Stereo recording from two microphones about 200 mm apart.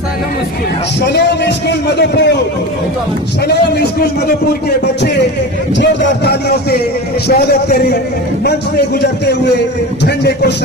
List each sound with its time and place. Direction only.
1.1 s a man's voice: 60° left (ahead or behind)
5.8 s a man's voice: 55° left (ahead or behind)